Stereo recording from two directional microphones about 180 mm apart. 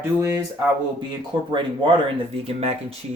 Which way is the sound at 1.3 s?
25° right (ahead or behind).